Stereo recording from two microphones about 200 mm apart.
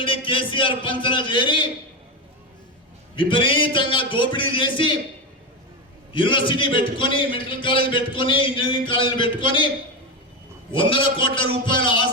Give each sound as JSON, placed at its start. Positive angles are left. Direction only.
{"t": 0.0, "sound": "a man's voice", "side_deg": 25}
{"t": 3.2, "sound": "a man's voice", "side_deg": 25}
{"t": 6.1, "sound": "a man's voice", "side_deg": 25}
{"t": 10.7, "sound": "a man's voice", "side_deg": 25}